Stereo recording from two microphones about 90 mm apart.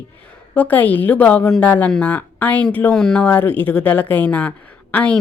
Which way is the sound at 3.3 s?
20° left (ahead or behind).